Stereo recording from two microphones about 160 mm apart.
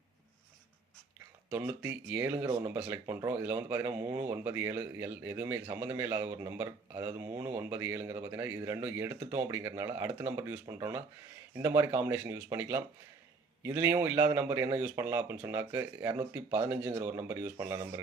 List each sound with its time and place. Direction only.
1.5 s speech: 15° right (ahead or behind)